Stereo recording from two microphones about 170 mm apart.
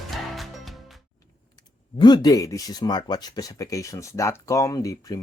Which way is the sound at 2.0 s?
25° left (ahead or behind).